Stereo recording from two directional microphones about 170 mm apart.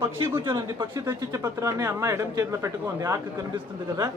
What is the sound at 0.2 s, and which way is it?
Speech, 30° right (ahead or behind).